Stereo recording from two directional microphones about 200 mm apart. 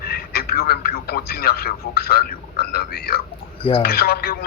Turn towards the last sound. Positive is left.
turn(degrees=50)  # may be behind; listen again after turning